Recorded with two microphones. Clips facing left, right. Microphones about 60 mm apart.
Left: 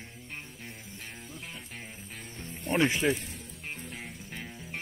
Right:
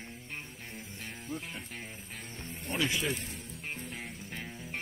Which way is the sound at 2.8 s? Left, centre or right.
Left.